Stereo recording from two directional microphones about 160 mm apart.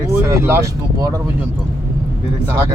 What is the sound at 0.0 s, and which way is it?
Speech, 15° right (ahead or behind).